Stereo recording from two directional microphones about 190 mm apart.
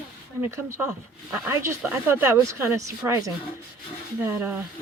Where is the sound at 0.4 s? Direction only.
15° right (ahead or behind).